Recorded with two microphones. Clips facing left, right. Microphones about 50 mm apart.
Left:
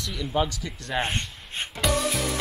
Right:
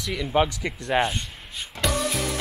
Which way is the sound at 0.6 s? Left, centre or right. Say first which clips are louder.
Right 6 dB; right.